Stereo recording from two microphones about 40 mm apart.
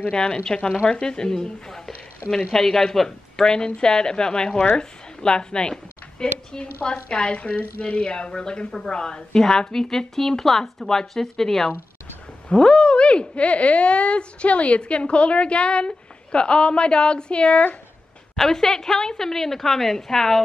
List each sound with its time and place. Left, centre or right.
0.1 s a woman's voice: left
7.3 s a woman's voice: left
18.3 s a woman's voice: centre